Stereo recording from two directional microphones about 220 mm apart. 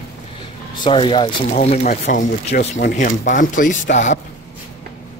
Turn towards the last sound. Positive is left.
turn(degrees=35)  # may be behind; listen again after turning